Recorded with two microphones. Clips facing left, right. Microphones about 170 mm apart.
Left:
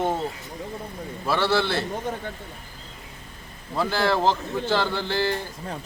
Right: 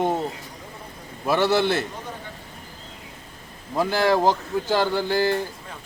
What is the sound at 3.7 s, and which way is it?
Speech, 15° right (ahead or behind).